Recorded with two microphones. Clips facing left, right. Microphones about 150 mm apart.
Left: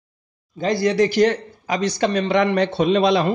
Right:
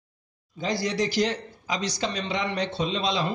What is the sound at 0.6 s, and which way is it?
Speech, 60° left (ahead or behind).